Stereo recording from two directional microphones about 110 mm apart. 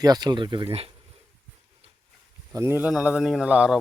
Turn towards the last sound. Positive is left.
turn(degrees=-10)  # may be behind; listen again after turning